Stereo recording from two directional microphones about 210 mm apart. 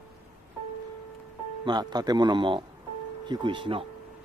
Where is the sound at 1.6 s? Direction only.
20° right (ahead or behind).